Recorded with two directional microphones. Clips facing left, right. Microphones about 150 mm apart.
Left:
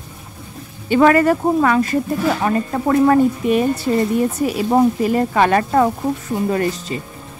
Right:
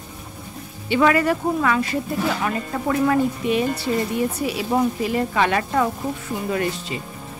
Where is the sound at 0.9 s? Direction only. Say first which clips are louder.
Left 5 dB; 45° left (ahead or behind).